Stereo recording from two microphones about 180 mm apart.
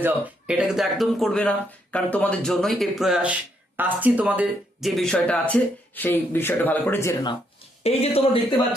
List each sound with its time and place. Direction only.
0.0 s speech: 5° right (ahead or behind); by 7.3 s 20° left (ahead or behind)
7.9 s speech: 35° left (ahead or behind)